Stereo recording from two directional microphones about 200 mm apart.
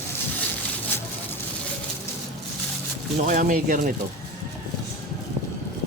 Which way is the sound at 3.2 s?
45° right (ahead or behind).